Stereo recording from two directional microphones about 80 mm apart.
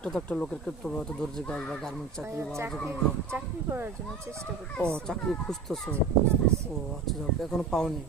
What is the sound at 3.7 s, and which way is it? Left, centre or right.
Speech, right.